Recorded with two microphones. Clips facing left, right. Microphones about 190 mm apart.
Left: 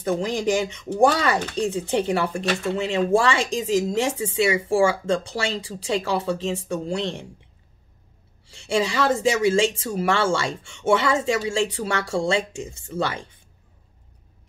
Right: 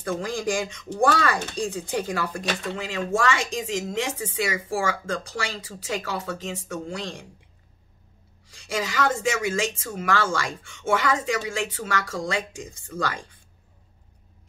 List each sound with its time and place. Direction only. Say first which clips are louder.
0.0 s speech: left 4 dB; 20° left (ahead or behind)
8.5 s speech: left 6 dB; 25° left (ahead or behind)